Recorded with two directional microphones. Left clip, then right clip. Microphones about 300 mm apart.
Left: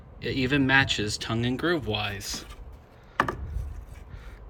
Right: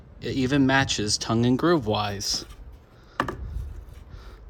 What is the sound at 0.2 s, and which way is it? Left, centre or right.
Speech, centre.